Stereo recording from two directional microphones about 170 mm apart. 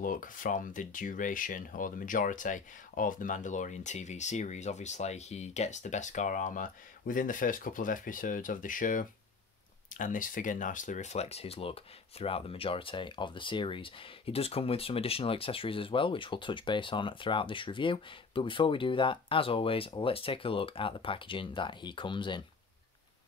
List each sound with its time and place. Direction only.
0.0 s speech: 55° left (ahead or behind); by 22.4 s 30° left (ahead or behind)